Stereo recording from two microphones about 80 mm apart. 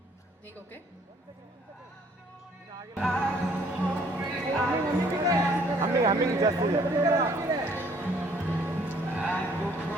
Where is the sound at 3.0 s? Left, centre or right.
Centre.